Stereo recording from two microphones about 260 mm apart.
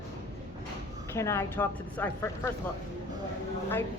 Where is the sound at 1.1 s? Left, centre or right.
Centre.